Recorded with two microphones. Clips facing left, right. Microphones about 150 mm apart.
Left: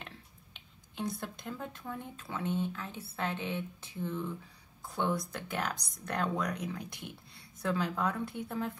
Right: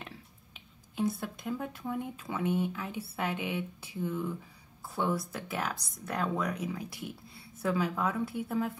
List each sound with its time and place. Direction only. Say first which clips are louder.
0.9 s speech: right 5 dB; 5° right (ahead or behind)